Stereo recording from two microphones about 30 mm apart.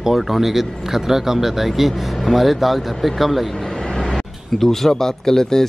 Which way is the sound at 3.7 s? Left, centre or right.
Left.